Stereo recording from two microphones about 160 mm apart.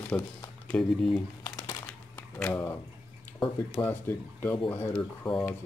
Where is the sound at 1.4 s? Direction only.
20° left (ahead or behind).